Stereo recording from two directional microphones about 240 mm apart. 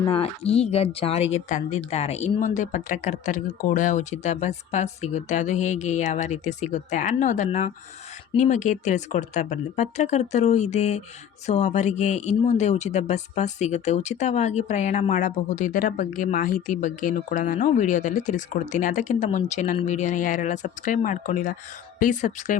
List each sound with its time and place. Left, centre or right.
0.0 s a woman's voice: left